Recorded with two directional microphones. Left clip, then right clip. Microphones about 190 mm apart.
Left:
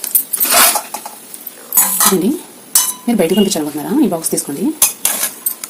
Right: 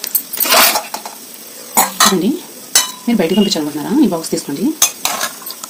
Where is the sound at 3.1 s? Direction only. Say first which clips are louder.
Left 2 dB; 15° left (ahead or behind).